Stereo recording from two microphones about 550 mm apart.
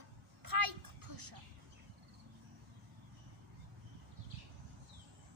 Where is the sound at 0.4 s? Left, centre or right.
Right.